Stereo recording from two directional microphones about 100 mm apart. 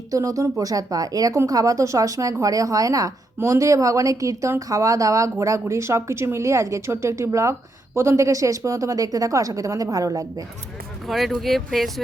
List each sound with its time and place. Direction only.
0.1 s a woman's voice: 35° right (ahead or behind)
11.1 s speech: centre (ahead or behind)